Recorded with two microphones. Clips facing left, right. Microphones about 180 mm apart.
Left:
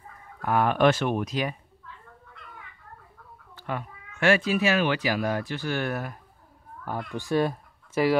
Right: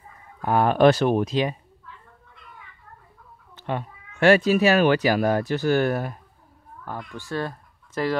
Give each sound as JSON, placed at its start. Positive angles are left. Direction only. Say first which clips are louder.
{"t": 0.4, "sound": "speech", "louder": "right 4 dB", "side_deg": -30}
{"t": 3.5, "sound": "speech", "louder": "right 4 dB", "side_deg": -25}
{"t": 7.2, "sound": "speech", "louder": "left 5 dB", "side_deg": 15}